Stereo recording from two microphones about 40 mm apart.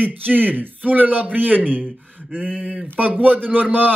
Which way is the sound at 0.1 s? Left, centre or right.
Right.